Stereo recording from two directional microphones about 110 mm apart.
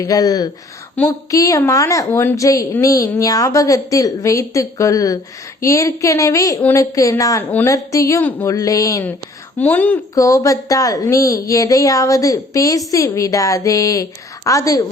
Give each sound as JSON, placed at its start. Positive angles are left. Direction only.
{"t": 0.0, "sound": "a woman's voice", "side_deg": 35}
{"t": 1.0, "sound": "speech", "side_deg": 10}
{"t": 1.3, "sound": "a woman's voice", "side_deg": 30}
{"t": 9.6, "sound": "speech", "side_deg": 15}
{"t": 10.2, "sound": "a woman's voice", "side_deg": 30}